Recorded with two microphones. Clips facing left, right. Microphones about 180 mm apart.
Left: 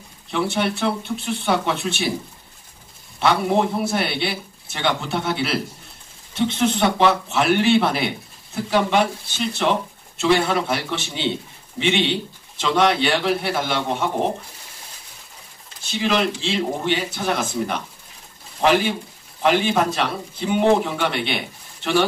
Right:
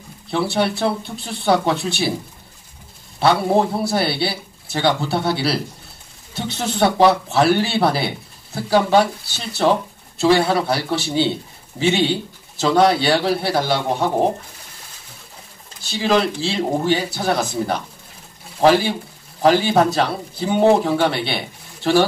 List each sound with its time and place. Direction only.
0.3 s speech: 35° right (ahead or behind)
3.2 s speech: 35° right (ahead or behind)
15.8 s speech: 35° right (ahead or behind)